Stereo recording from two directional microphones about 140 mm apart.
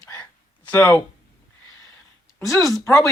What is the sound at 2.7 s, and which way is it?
Speech, 20° left (ahead or behind).